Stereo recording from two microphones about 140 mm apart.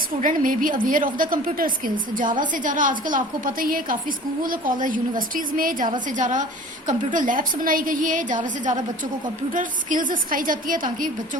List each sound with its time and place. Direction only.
0.2 s a woman's voice: 75° right (ahead or behind); by 3.9 s 90° right
4.4 s a woman's voice: 75° right (ahead or behind)
6.1 s a woman's voice: 65° right (ahead or behind)